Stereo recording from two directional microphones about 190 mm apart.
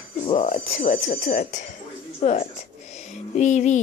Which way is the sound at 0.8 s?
45° left (ahead or behind).